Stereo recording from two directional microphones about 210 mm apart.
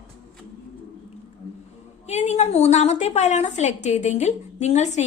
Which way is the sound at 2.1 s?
30° left (ahead or behind).